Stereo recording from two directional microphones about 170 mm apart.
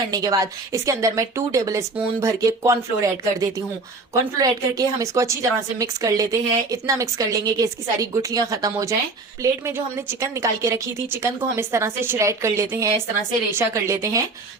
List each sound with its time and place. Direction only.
0.1 s a woman's voice: 20° right (ahead or behind)